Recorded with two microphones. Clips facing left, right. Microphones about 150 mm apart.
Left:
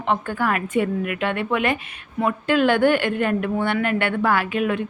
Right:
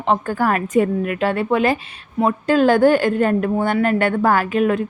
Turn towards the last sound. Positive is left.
turn(degrees=-40)  # may be behind; listen again after turning